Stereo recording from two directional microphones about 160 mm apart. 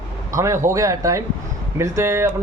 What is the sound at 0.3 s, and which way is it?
A man's voice, 20° right (ahead or behind).